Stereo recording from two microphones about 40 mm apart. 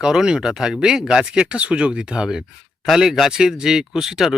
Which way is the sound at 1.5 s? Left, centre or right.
Right.